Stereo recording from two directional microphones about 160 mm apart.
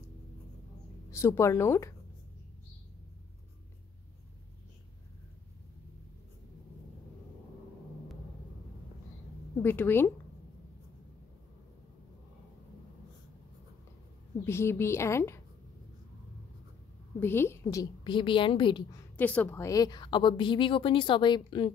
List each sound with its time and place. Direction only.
1.1 s a woman's voice: 15° left (ahead or behind)
9.6 s a woman's voice: 15° left (ahead or behind)
14.4 s a woman's voice: 15° left (ahead or behind)
17.2 s a woman's voice: 15° left (ahead or behind); by 18.9 s 30° left (ahead or behind)
19.1 s a woman's voice: 10° left (ahead or behind); by 21.7 s 30° left (ahead or behind)